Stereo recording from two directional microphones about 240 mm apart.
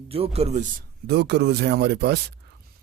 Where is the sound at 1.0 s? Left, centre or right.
Right.